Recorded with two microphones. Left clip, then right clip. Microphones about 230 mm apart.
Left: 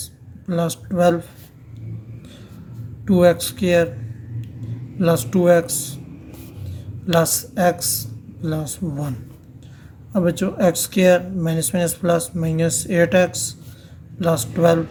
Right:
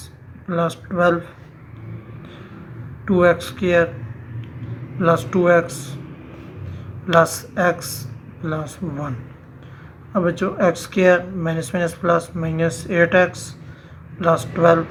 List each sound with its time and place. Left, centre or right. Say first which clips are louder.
0.4 s speech: right 2 dB; left
3.1 s speech: even; left
4.9 s speech: right 2 dB; left
7.1 s speech: right 3 dB; left